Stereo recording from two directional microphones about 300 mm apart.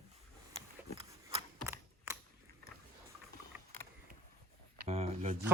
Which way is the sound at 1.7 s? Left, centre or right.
Centre.